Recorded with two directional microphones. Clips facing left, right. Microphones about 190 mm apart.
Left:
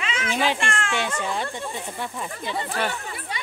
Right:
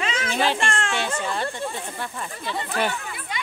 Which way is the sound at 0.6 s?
35° right (ahead or behind).